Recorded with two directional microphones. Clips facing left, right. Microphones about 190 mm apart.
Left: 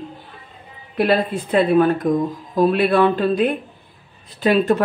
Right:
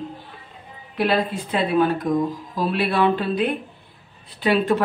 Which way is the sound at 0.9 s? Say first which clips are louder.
Left 3 dB; 50° left (ahead or behind).